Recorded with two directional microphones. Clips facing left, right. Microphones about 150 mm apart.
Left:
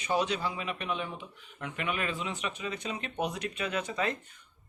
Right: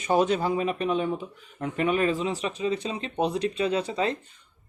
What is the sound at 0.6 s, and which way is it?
Speech, 35° right (ahead or behind).